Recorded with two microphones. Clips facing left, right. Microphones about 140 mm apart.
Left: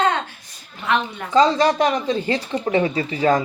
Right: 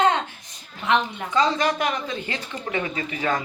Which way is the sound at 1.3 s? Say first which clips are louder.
Left 6 dB; 30° left (ahead or behind).